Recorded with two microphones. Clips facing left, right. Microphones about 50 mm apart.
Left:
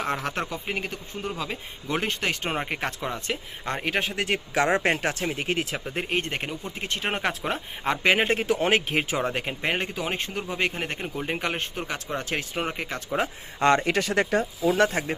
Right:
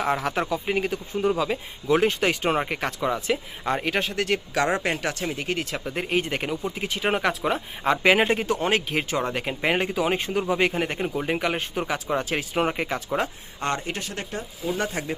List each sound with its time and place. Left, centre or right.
0.0 s speech: centre
4.5 s speech: left
5.7 s speech: centre
9.6 s speech: centre
13.6 s speech: left
13.8 s speech: left